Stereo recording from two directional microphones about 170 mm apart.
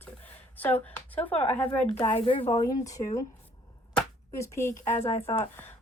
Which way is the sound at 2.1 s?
30° left (ahead or behind).